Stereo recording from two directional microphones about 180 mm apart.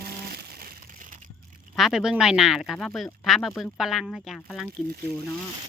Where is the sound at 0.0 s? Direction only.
60° right (ahead or behind).